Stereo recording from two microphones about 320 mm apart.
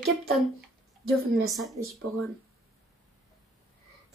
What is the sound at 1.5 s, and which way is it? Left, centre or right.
Speech, centre.